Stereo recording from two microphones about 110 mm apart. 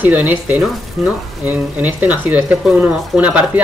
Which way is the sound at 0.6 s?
5° right (ahead or behind).